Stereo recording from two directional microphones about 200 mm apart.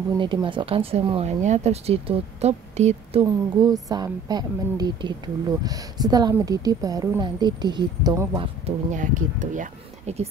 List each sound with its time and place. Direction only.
0.2 s speech: 25° right (ahead or behind)
3.3 s speech: 20° right (ahead or behind)
8.9 s speech: 40° right (ahead or behind)